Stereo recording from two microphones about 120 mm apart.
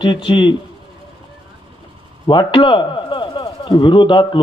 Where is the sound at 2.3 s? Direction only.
40° left (ahead or behind).